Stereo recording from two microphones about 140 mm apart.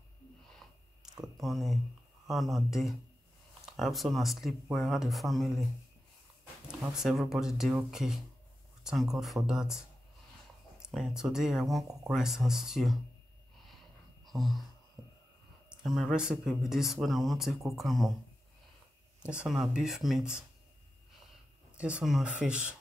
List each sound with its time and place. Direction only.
1.2 s speech: centre (ahead or behind)
7.0 s speech: centre (ahead or behind)
14.2 s a sound: centre (ahead or behind)
15.0 s a sound: 25° right (ahead or behind)
15.7 s speech: centre (ahead or behind)
19.2 s speech: 5° right (ahead or behind)
21.7 s speech: 10° right (ahead or behind)